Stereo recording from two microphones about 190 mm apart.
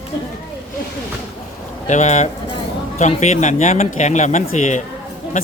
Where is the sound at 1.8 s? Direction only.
40° left (ahead or behind).